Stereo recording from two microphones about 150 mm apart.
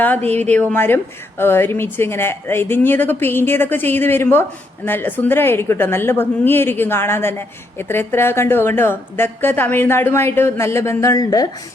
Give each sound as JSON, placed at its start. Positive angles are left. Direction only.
{"t": 0.3, "sound": "speech", "side_deg": 10}